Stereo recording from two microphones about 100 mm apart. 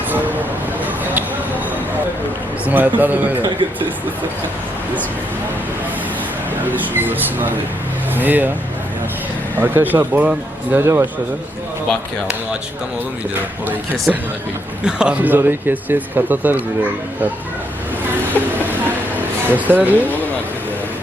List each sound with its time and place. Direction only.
0.1 s a sound: 15° right (ahead or behind)
2.6 s speech: 15° right (ahead or behind)
6.7 s speech: 20° right (ahead or behind)
9.6 s speech: 20° right (ahead or behind)
14.8 s speech: 10° right (ahead or behind)
18.4 s vehicle: 15° left (ahead or behind)
18.7 s a sound: 20° right (ahead or behind)